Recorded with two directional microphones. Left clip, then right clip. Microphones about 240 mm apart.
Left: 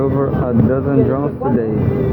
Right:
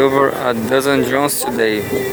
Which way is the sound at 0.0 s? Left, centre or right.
Right.